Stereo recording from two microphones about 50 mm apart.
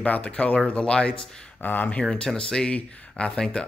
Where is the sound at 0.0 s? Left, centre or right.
Left.